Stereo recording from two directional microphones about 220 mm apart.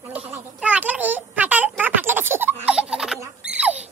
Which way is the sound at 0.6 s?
5° right (ahead or behind).